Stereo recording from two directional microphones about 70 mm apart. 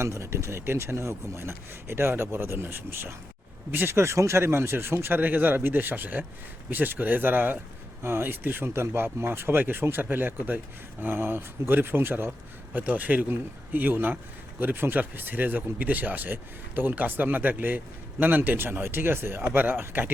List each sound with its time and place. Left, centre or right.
0.0 s speech: right